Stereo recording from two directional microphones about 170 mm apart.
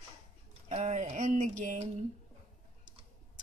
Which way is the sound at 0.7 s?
40° right (ahead or behind).